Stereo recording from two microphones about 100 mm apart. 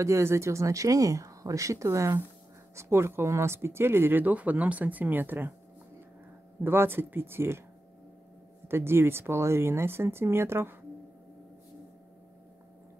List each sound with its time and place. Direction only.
0.0 s speech: 30° right (ahead or behind)
6.6 s speech: 20° right (ahead or behind)
8.6 s speech: 25° right (ahead or behind)